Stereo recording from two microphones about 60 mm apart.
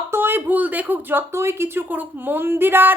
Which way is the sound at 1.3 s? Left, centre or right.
Right.